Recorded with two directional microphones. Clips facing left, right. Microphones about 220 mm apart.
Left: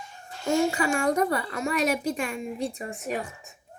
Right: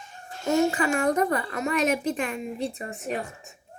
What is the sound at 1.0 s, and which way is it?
Speech, centre (ahead or behind).